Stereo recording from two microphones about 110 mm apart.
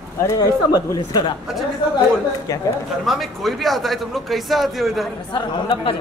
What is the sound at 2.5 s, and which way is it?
Speech, 35° left (ahead or behind).